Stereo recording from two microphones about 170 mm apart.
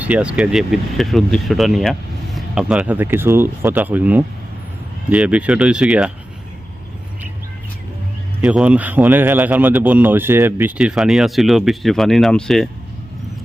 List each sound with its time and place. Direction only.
0.0 s a man's voice: 5° right (ahead or behind)
8.4 s a man's voice: 5° right (ahead or behind)